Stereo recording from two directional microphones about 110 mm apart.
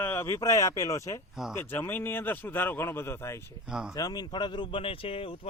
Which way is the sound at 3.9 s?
35° left (ahead or behind).